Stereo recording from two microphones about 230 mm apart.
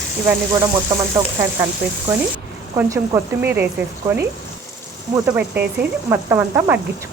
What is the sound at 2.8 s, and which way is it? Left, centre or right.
Speech, centre.